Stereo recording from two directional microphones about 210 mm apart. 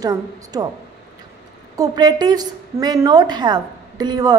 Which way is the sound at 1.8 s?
20° right (ahead or behind).